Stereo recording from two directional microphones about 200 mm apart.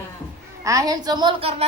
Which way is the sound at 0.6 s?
15° right (ahead or behind).